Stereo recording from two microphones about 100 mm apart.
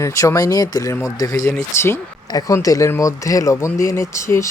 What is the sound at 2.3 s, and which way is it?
Speech, 40° left (ahead or behind).